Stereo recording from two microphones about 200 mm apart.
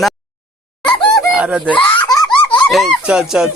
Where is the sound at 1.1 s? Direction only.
Centre (ahead or behind).